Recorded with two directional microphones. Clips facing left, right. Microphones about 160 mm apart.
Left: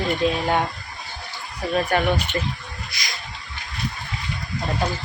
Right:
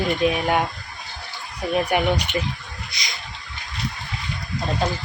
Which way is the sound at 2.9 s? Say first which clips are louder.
Even; 20° right (ahead or behind).